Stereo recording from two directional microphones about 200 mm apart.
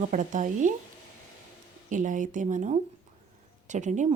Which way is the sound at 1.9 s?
40° right (ahead or behind).